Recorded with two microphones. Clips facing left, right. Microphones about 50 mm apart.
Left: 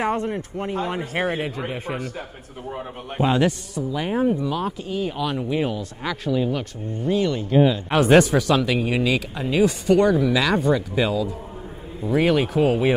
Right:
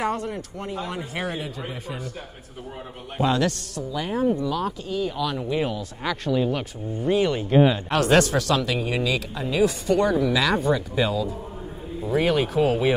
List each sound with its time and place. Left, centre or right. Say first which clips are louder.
0.0 s a man's voice: left 3 dB; left
1.4 s a man's voice: left 5 dB; left
3.2 s a man's voice: left 2 dB; left; by 6.6 s centre
7.1 s speech: even; centre
7.9 s speech: left 4 dB; centre